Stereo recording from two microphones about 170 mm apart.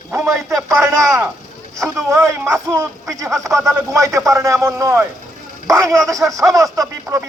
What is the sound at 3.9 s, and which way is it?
Speech, 15° right (ahead or behind).